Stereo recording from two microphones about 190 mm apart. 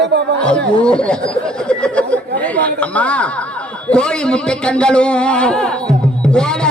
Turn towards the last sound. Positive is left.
turn(degrees=5)  # may be behind; listen again after turning